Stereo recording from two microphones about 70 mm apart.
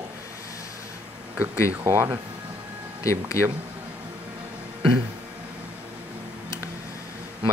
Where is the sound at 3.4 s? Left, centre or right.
Left.